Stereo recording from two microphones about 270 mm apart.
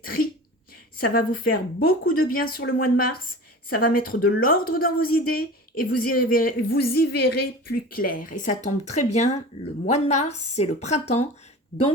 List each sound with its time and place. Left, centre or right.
0.0 s speech: left